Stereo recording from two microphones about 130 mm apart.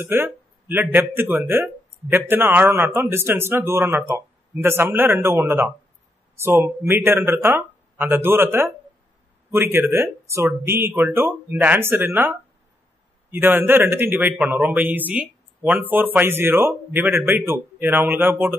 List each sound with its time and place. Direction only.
0.0 s speech: 15° right (ahead or behind)